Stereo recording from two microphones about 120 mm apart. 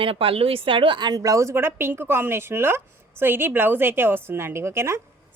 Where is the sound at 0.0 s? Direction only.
50° right (ahead or behind).